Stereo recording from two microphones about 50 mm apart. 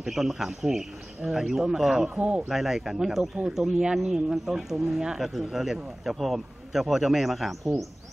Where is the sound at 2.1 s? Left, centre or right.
Right.